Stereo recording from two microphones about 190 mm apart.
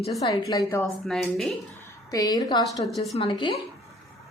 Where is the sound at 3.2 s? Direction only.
25° left (ahead or behind).